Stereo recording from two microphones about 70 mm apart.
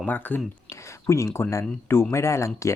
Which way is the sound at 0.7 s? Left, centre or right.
Left.